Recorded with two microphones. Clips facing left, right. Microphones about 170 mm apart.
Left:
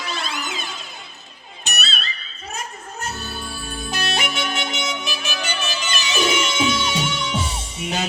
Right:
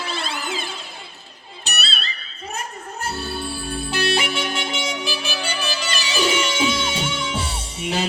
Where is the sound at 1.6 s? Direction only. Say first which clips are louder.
Left 1 dB; 30° right (ahead or behind).